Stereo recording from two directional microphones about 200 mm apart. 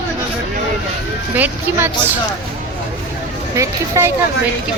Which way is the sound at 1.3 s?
10° right (ahead or behind).